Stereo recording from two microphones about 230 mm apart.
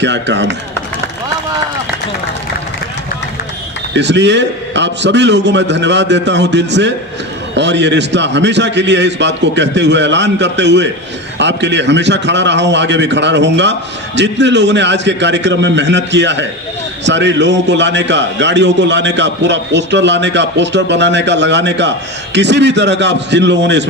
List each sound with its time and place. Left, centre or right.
0.0 s a man's voice: right
3.9 s a man's voice: right